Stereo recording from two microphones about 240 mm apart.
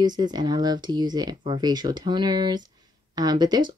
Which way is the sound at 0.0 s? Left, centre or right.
Centre.